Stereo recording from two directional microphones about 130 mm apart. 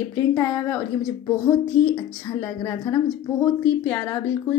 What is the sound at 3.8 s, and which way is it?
Speech, 25° left (ahead or behind).